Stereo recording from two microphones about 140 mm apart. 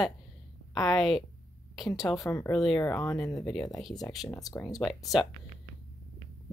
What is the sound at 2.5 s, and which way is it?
Speech, centre (ahead or behind).